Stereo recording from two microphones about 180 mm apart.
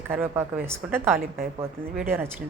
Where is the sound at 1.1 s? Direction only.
55° right (ahead or behind).